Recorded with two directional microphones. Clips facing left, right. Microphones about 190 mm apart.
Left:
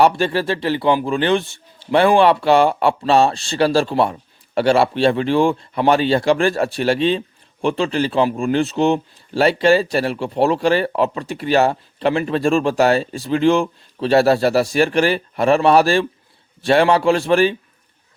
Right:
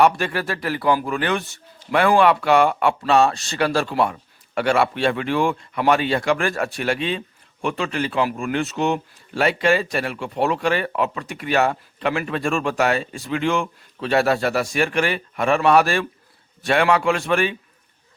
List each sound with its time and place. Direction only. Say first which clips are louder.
0.0 s speech: left 3 dB; 30° left (ahead or behind)